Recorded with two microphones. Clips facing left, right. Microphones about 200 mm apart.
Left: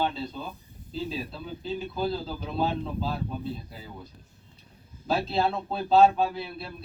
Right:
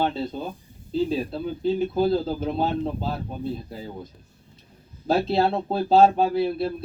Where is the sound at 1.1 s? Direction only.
45° right (ahead or behind).